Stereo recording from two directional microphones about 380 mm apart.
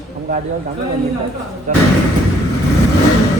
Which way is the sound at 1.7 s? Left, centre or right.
Centre.